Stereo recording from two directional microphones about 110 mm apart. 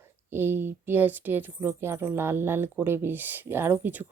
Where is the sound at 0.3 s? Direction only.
20° right (ahead or behind).